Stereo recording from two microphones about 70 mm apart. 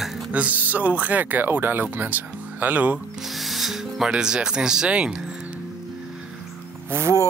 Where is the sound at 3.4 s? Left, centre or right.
Centre.